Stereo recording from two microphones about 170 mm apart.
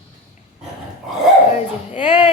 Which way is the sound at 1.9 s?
30° left (ahead or behind).